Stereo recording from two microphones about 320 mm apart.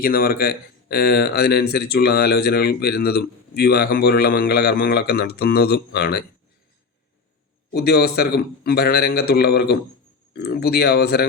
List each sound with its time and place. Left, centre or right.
0.0 s speech: left
7.7 s speech: left